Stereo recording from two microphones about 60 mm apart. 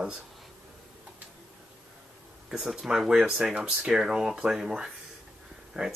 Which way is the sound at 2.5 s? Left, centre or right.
Centre.